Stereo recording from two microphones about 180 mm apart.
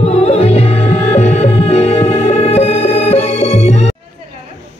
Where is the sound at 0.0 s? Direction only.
35° left (ahead or behind).